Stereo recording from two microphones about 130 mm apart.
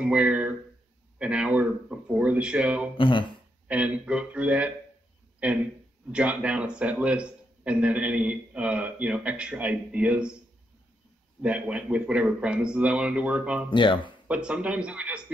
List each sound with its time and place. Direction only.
0.0 s a man's voice: 10° right (ahead or behind)
3.0 s speech: 40° left (ahead or behind)
3.6 s a man's voice: 10° right (ahead or behind)
11.4 s a man's voice: 10° right (ahead or behind)
13.7 s speech: 35° left (ahead or behind)
14.2 s a man's voice: 10° right (ahead or behind)